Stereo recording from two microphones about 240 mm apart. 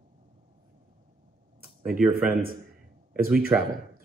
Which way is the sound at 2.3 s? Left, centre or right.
Right.